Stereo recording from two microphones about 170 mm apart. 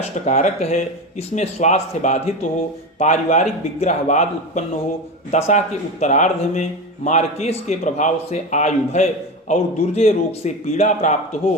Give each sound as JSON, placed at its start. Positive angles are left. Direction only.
{"t": 0.0, "sound": "a man's voice", "side_deg": 45}